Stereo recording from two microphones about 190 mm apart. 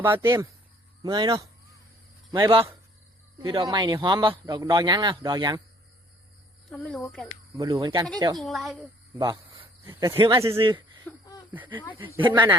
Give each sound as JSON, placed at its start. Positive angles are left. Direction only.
{"t": 0.0, "sound": "a man's voice", "side_deg": -15}
{"t": 6.7, "sound": "a woman's voice", "side_deg": 5}
{"t": 7.5, "sound": "a man's voice", "side_deg": -20}
{"t": 8.4, "sound": "a woman's voice", "side_deg": 0}
{"t": 9.1, "sound": "a sound", "side_deg": -20}
{"t": 9.9, "sound": "speech", "side_deg": -15}
{"t": 10.2, "sound": "a man's voice", "side_deg": -25}
{"t": 11.1, "sound": "speech", "side_deg": 5}
{"t": 12.1, "sound": "a man's voice", "side_deg": -25}